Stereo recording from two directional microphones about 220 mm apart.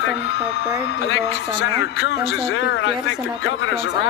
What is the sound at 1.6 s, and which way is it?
Speech, 50° left (ahead or behind).